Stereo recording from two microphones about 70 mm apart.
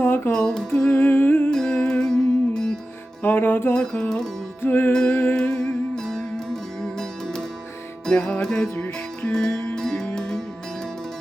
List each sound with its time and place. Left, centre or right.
0.0 s music: left
0.3 s music: centre
0.9 s humming: left
1.5 s music: centre
3.2 s music: left
4.9 s music: centre
5.1 s humming: left
5.4 s music: centre